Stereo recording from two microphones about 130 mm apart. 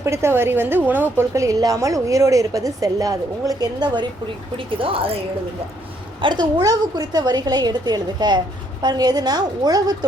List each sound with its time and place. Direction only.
0.0 s a woman's voice: 20° right (ahead or behind)
4.5 s speech: 45° right (ahead or behind)
6.2 s a woman's voice: 35° right (ahead or behind)